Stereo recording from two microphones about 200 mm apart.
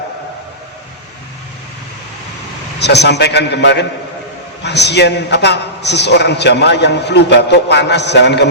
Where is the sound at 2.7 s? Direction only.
55° left (ahead or behind).